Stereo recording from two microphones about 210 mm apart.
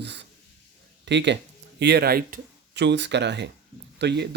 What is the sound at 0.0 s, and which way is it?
Speech, 55° right (ahead or behind).